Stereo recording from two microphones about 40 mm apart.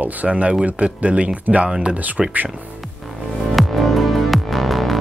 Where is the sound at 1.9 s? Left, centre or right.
Right.